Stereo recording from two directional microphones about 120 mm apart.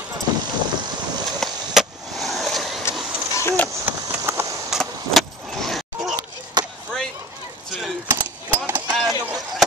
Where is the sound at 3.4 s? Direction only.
20° left (ahead or behind).